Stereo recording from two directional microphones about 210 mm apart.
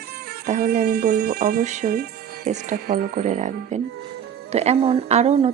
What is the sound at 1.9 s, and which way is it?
Music, 50° right (ahead or behind).